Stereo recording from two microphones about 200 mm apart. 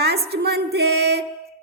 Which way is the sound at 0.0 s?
55° right (ahead or behind).